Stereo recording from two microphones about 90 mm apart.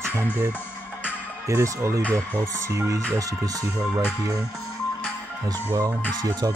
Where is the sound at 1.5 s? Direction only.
30° right (ahead or behind).